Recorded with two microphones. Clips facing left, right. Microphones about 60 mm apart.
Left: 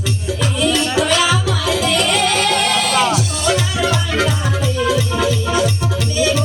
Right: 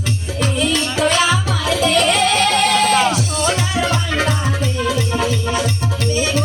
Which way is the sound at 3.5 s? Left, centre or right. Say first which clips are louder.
Left 3 dB; right.